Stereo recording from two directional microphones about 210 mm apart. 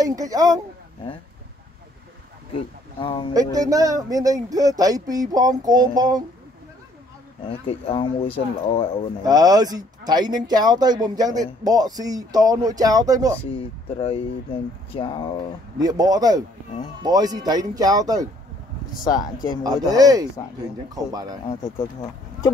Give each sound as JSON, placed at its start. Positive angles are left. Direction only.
{"t": 0.0, "sound": "speech", "side_deg": -15}
{"t": 3.0, "sound": "speech", "side_deg": 25}
{"t": 3.5, "sound": "speech", "side_deg": -15}
{"t": 7.4, "sound": "speech", "side_deg": 25}
{"t": 9.2, "sound": "speech", "side_deg": -20}
{"t": 13.5, "sound": "speech", "side_deg": 25}
{"t": 15.8, "sound": "speech", "side_deg": -20}
{"t": 19.6, "sound": "speech", "side_deg": -15}